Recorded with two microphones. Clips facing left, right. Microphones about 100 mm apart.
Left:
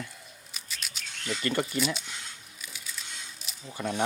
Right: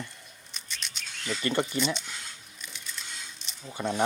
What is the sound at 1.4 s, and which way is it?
Speech, 25° right (ahead or behind).